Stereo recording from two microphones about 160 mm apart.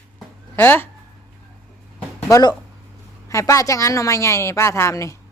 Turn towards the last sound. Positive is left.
turn(degrees=20)  # may be behind; listen again after turning